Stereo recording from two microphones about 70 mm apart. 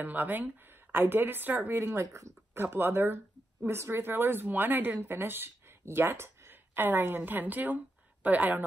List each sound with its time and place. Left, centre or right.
0.0 s speech: right